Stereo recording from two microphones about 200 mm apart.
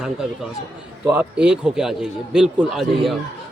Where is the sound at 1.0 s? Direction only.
5° right (ahead or behind).